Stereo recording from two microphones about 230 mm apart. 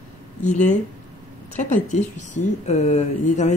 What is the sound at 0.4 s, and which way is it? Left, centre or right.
Speech, left.